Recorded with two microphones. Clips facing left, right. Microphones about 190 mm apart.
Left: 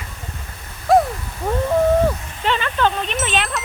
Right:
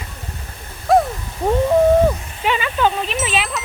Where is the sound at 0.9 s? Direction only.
Centre (ahead or behind).